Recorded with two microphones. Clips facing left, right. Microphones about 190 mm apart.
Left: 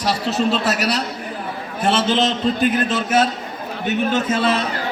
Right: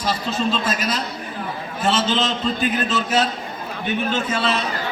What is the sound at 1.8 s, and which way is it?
A man's voice, 55° left (ahead or behind).